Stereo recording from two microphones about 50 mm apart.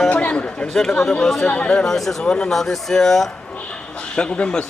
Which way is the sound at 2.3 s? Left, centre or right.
Centre.